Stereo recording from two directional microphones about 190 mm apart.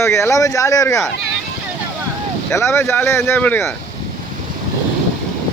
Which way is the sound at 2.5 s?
15° left (ahead or behind).